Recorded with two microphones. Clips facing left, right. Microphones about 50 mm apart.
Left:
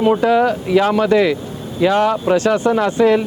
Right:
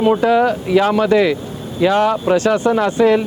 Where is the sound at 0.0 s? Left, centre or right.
Right.